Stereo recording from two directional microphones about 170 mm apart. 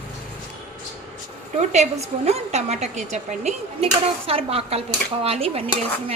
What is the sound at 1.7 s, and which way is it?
A woman's voice, 40° right (ahead or behind).